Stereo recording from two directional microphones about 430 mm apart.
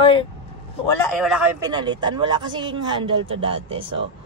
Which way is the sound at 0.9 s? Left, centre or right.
Centre.